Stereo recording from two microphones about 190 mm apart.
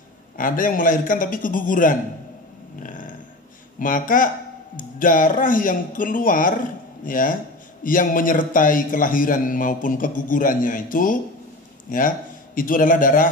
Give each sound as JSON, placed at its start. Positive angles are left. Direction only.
{"t": 0.4, "sound": "a man's voice", "side_deg": 45}
{"t": 2.8, "sound": "a sound", "side_deg": 45}
{"t": 3.8, "sound": "a man's voice", "side_deg": 45}